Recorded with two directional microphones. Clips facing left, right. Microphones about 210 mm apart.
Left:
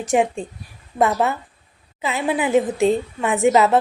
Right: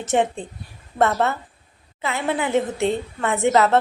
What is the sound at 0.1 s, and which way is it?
A woman's voice, 10° left (ahead or behind).